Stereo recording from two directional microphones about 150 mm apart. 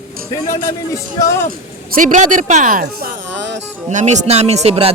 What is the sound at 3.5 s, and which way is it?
Speech, 55° right (ahead or behind).